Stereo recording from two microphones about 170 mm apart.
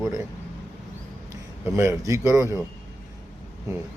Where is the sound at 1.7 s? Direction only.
15° right (ahead or behind).